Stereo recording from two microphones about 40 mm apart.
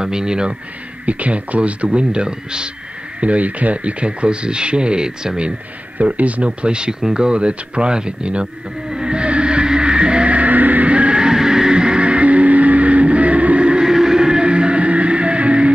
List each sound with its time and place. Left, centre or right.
0.0 s speech: centre
1.0 s speech: right
1.9 s speech: right
3.2 s speech: right; by 5.5 s centre
5.9 s speech: right
8.9 s vehicle: right
13.8 s music: centre